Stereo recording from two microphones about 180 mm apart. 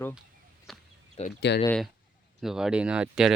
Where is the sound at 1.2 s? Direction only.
35° left (ahead or behind).